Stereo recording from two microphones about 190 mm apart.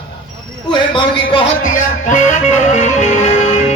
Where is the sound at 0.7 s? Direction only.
25° left (ahead or behind).